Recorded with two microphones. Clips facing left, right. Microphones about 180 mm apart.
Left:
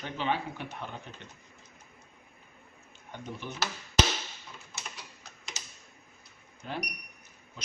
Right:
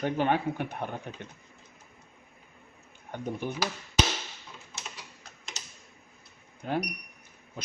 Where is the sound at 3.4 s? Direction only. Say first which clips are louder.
Right 7 dB; 50° right (ahead or behind).